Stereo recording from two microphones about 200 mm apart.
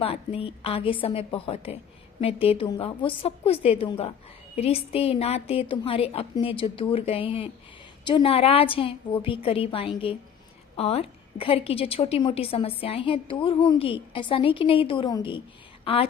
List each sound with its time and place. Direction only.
0.0 s a woman's voice: 30° left (ahead or behind)